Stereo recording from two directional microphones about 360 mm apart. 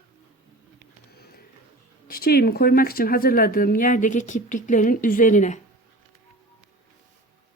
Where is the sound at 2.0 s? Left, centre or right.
Left.